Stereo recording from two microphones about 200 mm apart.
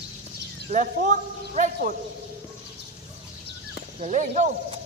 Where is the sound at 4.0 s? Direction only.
35° right (ahead or behind).